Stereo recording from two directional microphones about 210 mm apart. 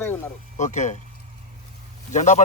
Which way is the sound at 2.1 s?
35° left (ahead or behind).